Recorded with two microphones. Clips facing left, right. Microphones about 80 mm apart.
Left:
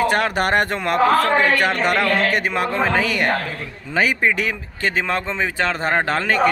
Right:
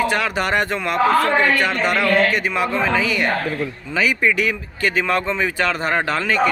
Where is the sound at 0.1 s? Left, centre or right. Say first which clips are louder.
Left 2 dB; left.